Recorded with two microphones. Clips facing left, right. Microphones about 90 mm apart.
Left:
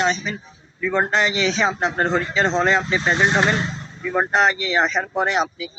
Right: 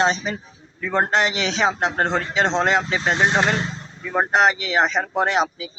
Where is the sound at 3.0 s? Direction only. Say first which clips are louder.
Left 1 dB; 40° right (ahead or behind).